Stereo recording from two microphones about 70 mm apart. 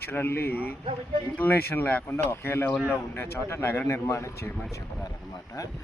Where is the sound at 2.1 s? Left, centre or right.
Left.